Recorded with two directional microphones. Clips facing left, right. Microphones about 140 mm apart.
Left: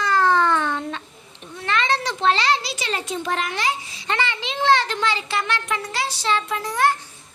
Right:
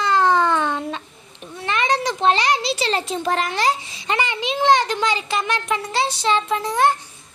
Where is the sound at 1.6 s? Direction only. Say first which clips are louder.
Right 2 dB; 15° right (ahead or behind); by 3.8 s 35° right (ahead or behind).